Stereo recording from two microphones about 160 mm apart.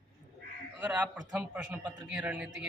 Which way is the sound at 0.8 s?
10° right (ahead or behind).